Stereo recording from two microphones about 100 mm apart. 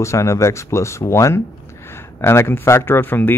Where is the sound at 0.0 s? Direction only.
30° left (ahead or behind).